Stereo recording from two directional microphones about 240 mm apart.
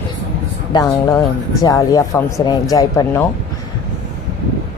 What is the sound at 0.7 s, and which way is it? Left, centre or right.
Speech, centre.